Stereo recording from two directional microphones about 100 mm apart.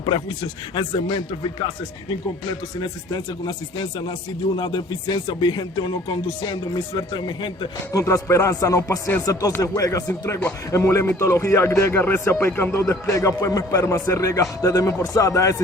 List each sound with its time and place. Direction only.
0.7 s speech: 55° left (ahead or behind)
2.8 s speech: 50° left (ahead or behind)
7.9 s a man's voice: 30° left (ahead or behind)
12.9 s a man's voice: 30° left (ahead or behind)